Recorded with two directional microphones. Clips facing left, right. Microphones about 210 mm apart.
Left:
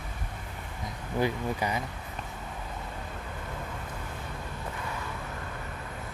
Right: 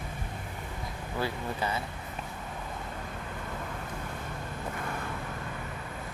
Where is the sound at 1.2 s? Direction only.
15° left (ahead or behind).